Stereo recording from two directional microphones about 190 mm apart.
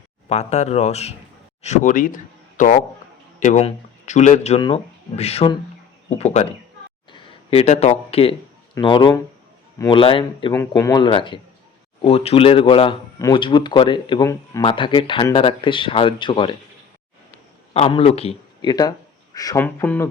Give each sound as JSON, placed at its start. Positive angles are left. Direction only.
{"t": 0.3, "sound": "speech", "side_deg": 35}
{"t": 10.5, "sound": "speech", "side_deg": 15}
{"t": 17.7, "sound": "a man's voice", "side_deg": 30}
{"t": 18.7, "sound": "speech", "side_deg": 20}